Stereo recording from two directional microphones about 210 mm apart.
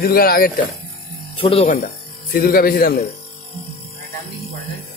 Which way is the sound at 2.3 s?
45° left (ahead or behind).